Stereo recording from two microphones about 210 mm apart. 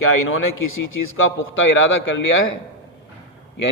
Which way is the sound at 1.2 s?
70° left (ahead or behind).